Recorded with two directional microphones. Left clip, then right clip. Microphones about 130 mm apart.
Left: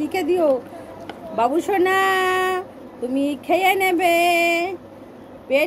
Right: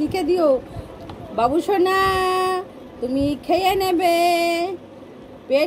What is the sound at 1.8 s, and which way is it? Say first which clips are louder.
Speech: even; 25° right (ahead or behind).